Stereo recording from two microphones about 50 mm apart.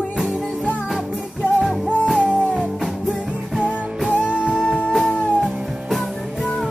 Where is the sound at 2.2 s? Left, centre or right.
Centre.